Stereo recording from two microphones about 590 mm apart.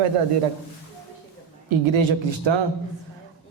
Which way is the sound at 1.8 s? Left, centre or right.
Right.